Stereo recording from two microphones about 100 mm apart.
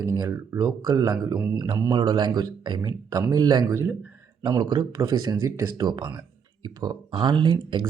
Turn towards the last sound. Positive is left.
turn(degrees=-50)  # may be behind; listen again after turning